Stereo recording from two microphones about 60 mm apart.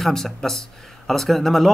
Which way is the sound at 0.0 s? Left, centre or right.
Centre.